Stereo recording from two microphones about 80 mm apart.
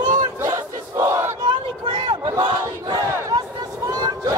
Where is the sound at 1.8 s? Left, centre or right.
Right.